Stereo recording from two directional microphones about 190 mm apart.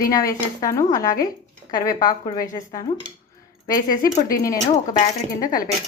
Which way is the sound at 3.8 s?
45° left (ahead or behind).